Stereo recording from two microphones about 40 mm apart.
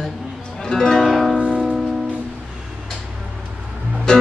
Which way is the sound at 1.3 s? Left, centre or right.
Right.